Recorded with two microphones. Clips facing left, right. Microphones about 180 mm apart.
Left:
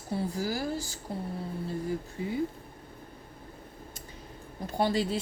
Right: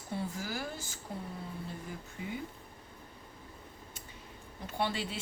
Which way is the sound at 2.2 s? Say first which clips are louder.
Left 3 dB; 35° left (ahead or behind).